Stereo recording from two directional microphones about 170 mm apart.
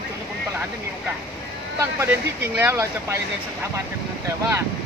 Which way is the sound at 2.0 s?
15° right (ahead or behind).